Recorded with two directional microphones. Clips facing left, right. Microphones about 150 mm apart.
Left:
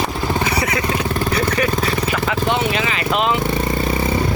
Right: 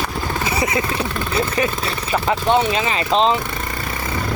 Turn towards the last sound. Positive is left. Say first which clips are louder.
# right 2 dB
turn(degrees=-30)  # may be behind; listen again after turning